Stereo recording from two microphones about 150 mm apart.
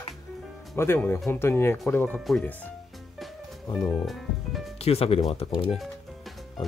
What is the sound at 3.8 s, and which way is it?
Speech, centre (ahead or behind).